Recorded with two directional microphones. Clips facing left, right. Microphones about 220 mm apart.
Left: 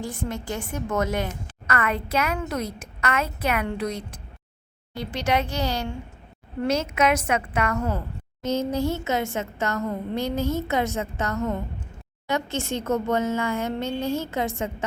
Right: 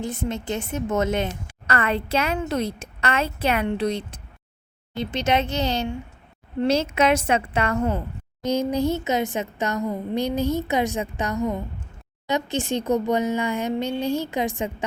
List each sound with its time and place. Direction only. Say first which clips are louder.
0.0 s a woman's voice: right 3 dB; 20° right (ahead or behind)